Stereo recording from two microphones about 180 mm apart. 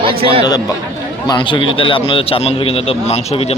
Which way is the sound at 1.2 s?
25° left (ahead or behind).